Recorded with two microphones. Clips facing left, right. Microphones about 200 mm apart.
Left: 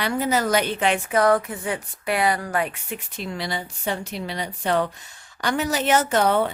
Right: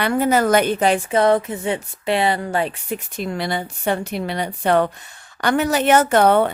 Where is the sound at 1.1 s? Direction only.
25° right (ahead or behind).